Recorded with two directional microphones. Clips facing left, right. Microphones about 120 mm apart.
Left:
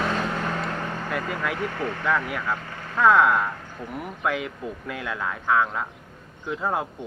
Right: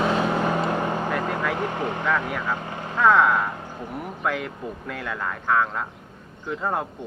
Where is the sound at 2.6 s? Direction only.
20° right (ahead or behind).